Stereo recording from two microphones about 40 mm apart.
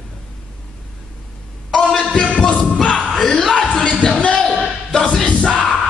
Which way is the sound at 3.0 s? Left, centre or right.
Centre.